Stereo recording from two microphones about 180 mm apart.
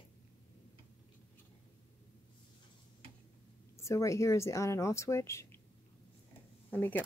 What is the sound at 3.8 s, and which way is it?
Speech, 15° left (ahead or behind).